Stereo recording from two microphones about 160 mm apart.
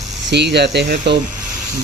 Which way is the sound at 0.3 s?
90° right.